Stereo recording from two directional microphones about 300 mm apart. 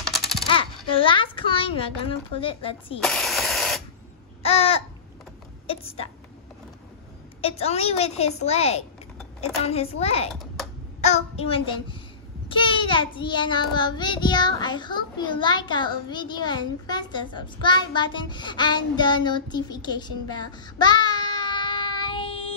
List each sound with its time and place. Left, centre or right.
0.0 s coin: centre
0.5 s a child's voice: centre
3.0 s spray: centre
4.4 s babbling: centre
5.7 s a sound: centre
7.4 s a woman's voice: centre
10.3 s a sound: centre
11.0 s child singing: left